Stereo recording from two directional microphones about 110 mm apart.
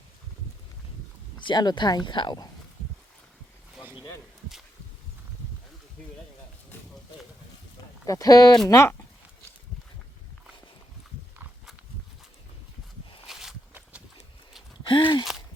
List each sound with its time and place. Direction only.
1.4 s speech: 45° left (ahead or behind)
8.0 s speech: 30° left (ahead or behind)
13.2 s walk: 5° right (ahead or behind)
14.8 s a sound: 45° left (ahead or behind)